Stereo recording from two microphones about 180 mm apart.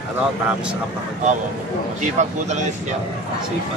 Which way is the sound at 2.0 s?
40° right (ahead or behind).